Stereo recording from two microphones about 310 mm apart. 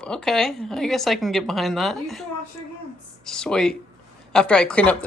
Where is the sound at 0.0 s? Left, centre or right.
Centre.